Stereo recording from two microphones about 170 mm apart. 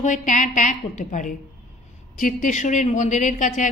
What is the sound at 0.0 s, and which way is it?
A woman's voice, 45° left (ahead or behind).